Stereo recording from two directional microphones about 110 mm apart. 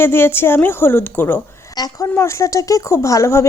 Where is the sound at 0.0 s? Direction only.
20° left (ahead or behind).